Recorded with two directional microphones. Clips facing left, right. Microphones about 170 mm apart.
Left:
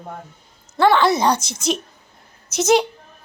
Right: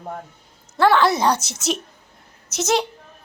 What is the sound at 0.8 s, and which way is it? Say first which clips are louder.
A woman's voice: left 1 dB; centre (ahead or behind).